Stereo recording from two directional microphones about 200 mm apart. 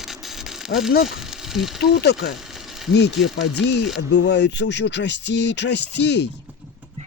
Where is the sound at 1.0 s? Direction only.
Centre (ahead or behind).